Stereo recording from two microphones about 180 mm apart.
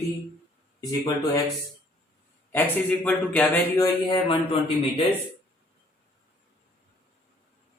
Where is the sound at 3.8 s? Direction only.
25° left (ahead or behind).